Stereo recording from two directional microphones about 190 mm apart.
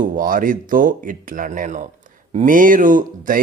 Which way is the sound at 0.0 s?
45° right (ahead or behind).